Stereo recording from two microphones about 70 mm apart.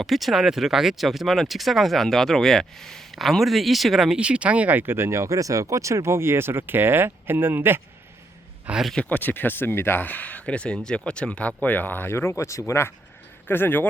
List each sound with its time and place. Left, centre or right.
0.0 s speech: centre
4.2 s speech: centre; by 7.8 s right
9.0 s speech: left
13.5 s speech: left